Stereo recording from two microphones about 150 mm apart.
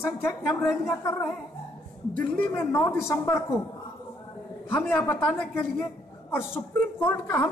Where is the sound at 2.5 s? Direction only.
15° left (ahead or behind).